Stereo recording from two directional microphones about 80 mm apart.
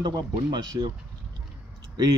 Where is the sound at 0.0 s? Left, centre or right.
Right.